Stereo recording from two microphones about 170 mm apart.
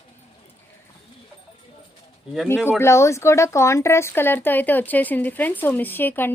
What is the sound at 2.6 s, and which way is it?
Speech, 15° left (ahead or behind).